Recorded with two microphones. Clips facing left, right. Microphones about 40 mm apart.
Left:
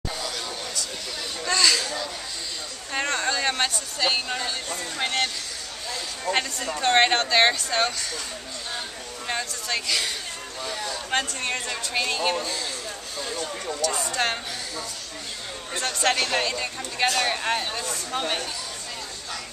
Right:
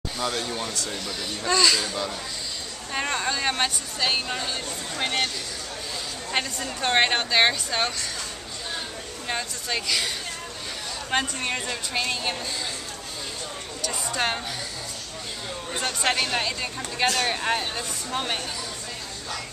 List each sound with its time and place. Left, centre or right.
0.2 s a sound: right
1.4 s speech: centre
2.9 s speech: centre
6.8 s speech: centre
9.3 s speech: centre
13.7 s speech: centre
15.7 s speech: centre